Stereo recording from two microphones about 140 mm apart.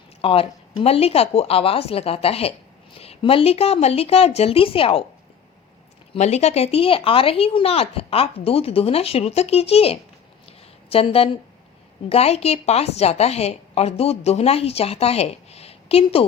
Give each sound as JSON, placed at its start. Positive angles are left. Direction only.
{"t": 0.2, "sound": "a woman's voice", "side_deg": 40}
{"t": 6.1, "sound": "a woman's voice", "side_deg": 55}